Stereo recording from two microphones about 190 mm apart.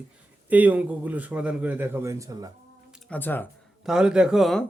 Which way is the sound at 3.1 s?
10° left (ahead or behind).